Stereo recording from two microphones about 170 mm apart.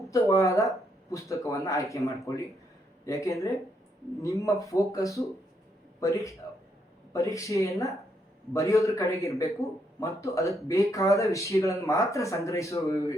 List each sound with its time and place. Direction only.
0.1 s speech: 20° left (ahead or behind)